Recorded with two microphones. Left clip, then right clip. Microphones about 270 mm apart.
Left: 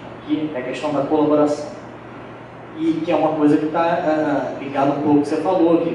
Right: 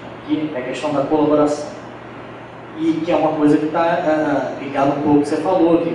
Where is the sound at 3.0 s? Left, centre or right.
Centre.